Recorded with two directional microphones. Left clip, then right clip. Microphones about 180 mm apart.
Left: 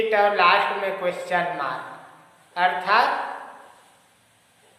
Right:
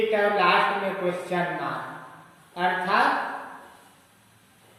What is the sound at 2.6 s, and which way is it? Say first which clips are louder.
Speech: left 4 dB; 20° left (ahead or behind).